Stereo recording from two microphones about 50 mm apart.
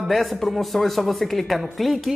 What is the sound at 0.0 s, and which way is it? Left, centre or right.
A woman's voice, centre.